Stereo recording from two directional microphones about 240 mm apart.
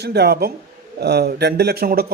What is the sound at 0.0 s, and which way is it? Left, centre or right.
Speech, right.